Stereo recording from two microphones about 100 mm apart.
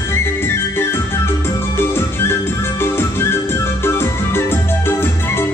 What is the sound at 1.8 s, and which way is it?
Music, 25° left (ahead or behind).